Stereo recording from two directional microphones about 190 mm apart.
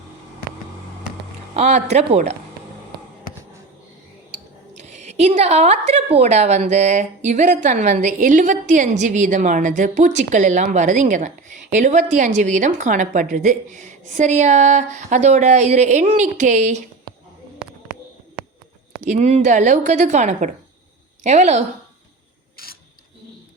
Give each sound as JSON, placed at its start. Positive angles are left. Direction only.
{"t": 1.5, "sound": "a woman's voice", "side_deg": -35}
{"t": 4.7, "sound": "a woman's voice", "side_deg": -40}
{"t": 19.0, "sound": "a woman's voice", "side_deg": -40}
{"t": 22.5, "sound": "a sound", "side_deg": 50}